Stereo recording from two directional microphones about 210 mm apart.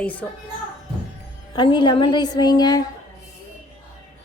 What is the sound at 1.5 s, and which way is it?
A woman's voice, 20° left (ahead or behind).